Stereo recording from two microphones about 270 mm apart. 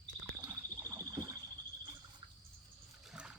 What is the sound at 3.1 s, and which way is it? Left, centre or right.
Rowboat, centre.